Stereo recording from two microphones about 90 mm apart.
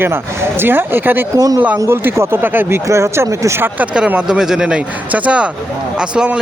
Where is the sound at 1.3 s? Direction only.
45° right (ahead or behind).